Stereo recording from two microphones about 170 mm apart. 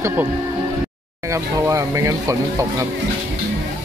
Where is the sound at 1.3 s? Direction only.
20° right (ahead or behind).